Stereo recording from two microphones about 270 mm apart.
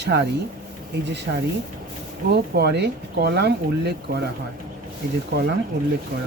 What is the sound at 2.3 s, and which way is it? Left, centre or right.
Speech, right.